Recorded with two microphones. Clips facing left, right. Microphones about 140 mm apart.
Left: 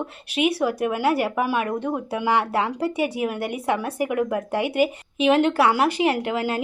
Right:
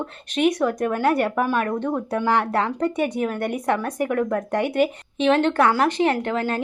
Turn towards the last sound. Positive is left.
turn(degrees=10)  # may be behind; listen again after turning